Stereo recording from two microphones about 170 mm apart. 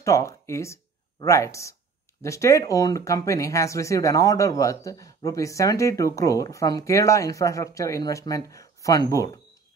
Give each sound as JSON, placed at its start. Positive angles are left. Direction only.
{"t": 0.0, "sound": "speech", "side_deg": 15}